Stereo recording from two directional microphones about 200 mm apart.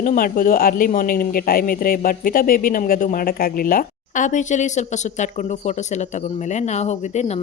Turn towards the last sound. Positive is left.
turn(degrees=35)  # may be behind; listen again after turning